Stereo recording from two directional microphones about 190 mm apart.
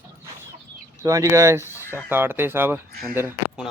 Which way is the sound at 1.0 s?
15° right (ahead or behind).